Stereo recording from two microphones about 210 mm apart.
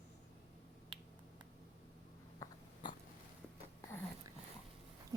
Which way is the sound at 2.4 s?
15° left (ahead or behind).